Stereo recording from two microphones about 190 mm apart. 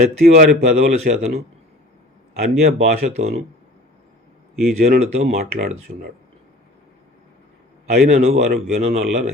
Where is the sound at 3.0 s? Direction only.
35° right (ahead or behind).